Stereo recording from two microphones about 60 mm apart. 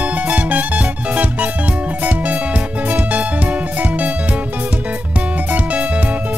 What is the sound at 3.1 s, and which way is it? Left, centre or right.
Music, right.